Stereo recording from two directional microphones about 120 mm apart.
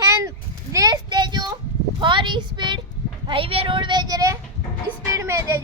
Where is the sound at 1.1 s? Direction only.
40° right (ahead or behind).